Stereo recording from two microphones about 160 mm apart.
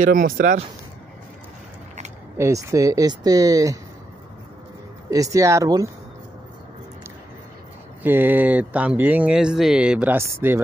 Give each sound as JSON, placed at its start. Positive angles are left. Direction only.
{"t": 0.0, "sound": "speech", "side_deg": -55}
{"t": 2.3, "sound": "speech", "side_deg": -20}
{"t": 5.1, "sound": "speech", "side_deg": -20}
{"t": 8.0, "sound": "speech", "side_deg": -10}